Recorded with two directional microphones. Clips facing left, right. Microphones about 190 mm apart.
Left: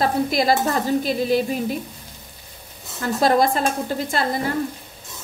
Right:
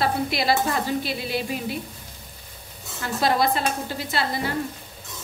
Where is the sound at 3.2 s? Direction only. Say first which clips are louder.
Left 4 dB; 45° left (ahead or behind).